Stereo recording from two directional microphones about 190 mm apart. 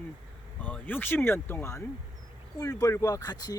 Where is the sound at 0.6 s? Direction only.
10° left (ahead or behind).